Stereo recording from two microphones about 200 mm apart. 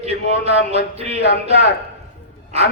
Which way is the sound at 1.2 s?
60° left (ahead or behind).